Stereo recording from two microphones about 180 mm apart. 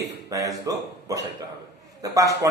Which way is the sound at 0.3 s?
20° right (ahead or behind).